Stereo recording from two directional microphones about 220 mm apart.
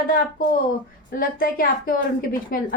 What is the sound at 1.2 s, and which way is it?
A woman's voice, 40° left (ahead or behind).